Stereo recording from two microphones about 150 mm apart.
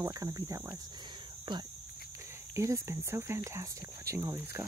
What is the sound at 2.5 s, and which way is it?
Speech, 20° right (ahead or behind).